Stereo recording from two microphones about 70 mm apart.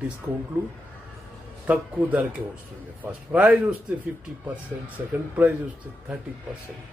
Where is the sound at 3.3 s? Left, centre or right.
Right.